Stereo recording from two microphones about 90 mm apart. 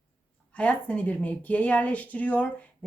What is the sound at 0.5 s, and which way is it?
Speech, 15° left (ahead or behind).